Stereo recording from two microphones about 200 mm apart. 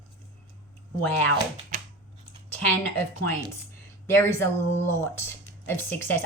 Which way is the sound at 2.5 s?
10° left (ahead or behind).